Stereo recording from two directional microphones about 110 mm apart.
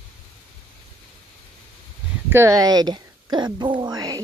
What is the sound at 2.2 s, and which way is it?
Speech, 25° right (ahead or behind).